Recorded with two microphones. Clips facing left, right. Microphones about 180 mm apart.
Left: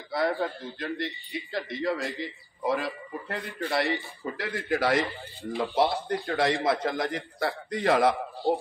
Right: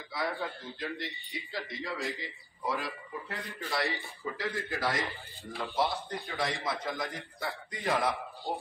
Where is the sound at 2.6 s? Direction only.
60° left (ahead or behind); by 8.1 s 75° left (ahead or behind).